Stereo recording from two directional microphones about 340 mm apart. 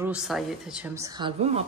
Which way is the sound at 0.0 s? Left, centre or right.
Centre.